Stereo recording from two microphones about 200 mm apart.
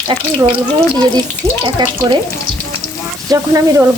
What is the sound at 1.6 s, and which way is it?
Speech, 20° right (ahead or behind).